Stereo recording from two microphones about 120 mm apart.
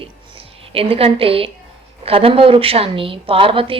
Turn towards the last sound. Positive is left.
turn(degrees=-50)  # may be behind; listen again after turning